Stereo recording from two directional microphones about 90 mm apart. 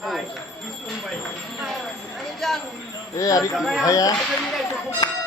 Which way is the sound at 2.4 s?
5° left (ahead or behind).